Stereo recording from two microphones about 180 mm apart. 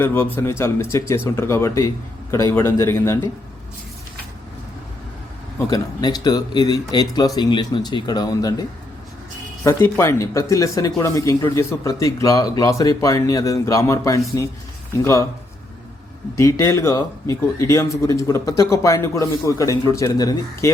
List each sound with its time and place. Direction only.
0.0 s speech: 10° left (ahead or behind)
5.5 s speech: 20° left (ahead or behind)
9.6 s speech: 15° left (ahead or behind)
16.4 s speech: 15° left (ahead or behind)